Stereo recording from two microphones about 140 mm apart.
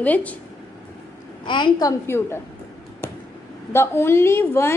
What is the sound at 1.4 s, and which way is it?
Speech, 35° left (ahead or behind).